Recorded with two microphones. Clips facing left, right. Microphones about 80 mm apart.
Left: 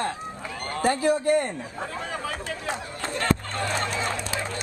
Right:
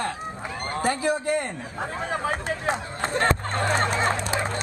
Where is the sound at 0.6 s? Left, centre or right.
Right.